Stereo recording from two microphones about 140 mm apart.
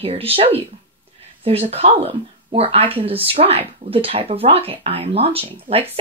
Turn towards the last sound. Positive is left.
turn(degrees=-45)  # may be behind; listen again after turning